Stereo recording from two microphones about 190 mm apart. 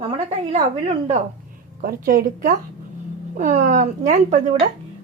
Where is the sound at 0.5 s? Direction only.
35° right (ahead or behind).